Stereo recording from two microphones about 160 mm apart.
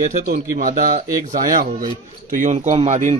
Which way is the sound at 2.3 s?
50° right (ahead or behind).